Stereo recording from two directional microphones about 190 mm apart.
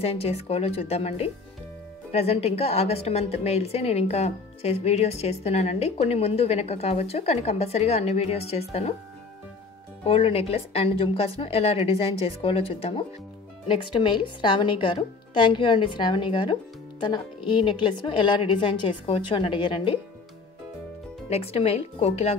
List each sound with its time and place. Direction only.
0.0 s a woman's voice: 30° left (ahead or behind)
10.0 s a woman's voice: 30° left (ahead or behind)
21.3 s a woman's voice: 30° left (ahead or behind)